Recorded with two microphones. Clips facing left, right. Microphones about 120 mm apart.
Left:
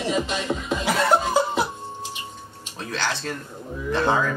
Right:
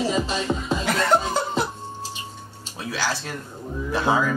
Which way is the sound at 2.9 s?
10° right (ahead or behind).